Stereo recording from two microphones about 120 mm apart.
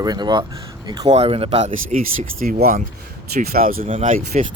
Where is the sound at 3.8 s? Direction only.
75° right (ahead or behind); by 4.4 s 90° right.